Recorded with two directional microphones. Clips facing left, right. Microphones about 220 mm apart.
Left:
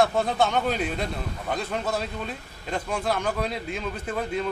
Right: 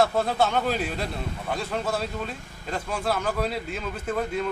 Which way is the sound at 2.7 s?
5° right (ahead or behind).